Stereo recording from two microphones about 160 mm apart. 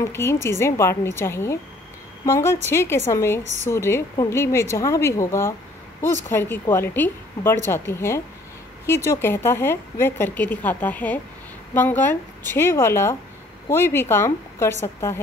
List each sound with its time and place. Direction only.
0.0 s a woman's voice: 15° left (ahead or behind)